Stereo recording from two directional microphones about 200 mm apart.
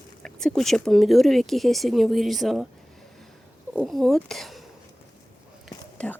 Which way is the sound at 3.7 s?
Centre (ahead or behind).